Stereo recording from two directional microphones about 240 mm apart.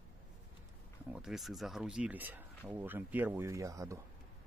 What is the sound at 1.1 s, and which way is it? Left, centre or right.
Speech, centre.